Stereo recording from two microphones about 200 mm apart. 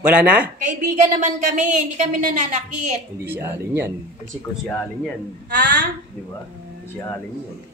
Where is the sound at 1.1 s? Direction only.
35° right (ahead or behind).